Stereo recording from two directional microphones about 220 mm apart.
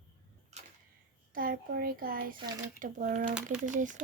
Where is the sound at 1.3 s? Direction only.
40° right (ahead or behind).